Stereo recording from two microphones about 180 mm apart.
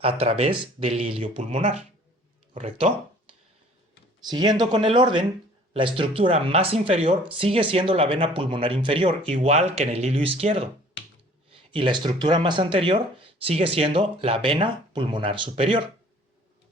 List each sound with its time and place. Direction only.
0.0 s speech: 30° right (ahead or behind)
4.3 s speech: 25° right (ahead or behind)